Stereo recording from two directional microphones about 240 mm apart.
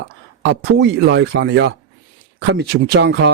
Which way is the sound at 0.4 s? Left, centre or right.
Right.